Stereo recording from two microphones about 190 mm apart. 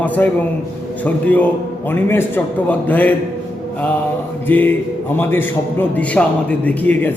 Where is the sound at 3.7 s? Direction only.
10° left (ahead or behind).